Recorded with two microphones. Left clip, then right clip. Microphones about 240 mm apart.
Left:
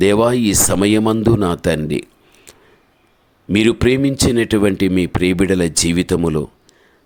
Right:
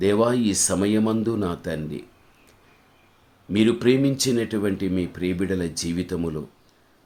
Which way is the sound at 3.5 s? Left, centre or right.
Left.